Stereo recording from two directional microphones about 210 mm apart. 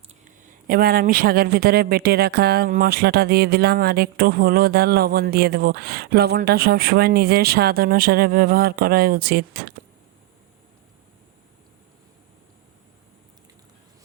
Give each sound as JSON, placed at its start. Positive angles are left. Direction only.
{"t": 0.4, "sound": "a man's voice", "side_deg": -45}